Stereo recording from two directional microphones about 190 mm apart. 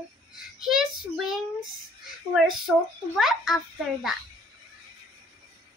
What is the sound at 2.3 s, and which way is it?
A child's voice, centre (ahead or behind).